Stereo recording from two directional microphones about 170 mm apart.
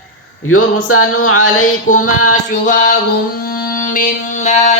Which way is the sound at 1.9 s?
45° left (ahead or behind).